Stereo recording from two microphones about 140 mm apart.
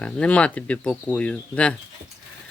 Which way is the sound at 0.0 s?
10° left (ahead or behind).